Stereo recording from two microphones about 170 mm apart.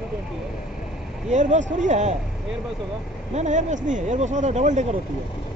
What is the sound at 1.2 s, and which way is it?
Speech, 45° right (ahead or behind).